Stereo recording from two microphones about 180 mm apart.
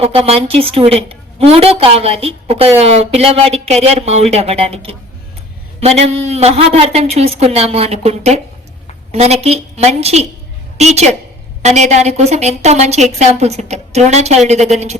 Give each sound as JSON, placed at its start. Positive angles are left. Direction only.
{"t": 0.0, "sound": "a woman's voice", "side_deg": -30}